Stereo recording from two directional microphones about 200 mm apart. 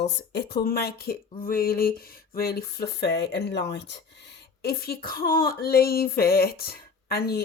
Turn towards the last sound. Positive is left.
turn(degrees=50)  # may be behind; listen again after turning